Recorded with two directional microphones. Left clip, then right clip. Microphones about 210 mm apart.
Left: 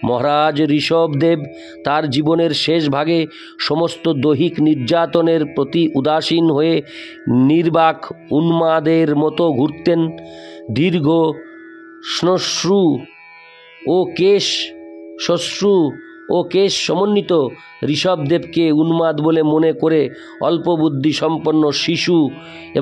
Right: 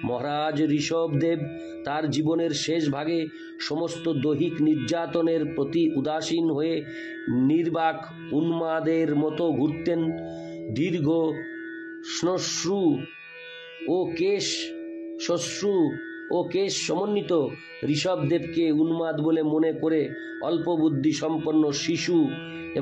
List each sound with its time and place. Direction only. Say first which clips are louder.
0.0 s speech: left 12 dB; 55° left (ahead or behind)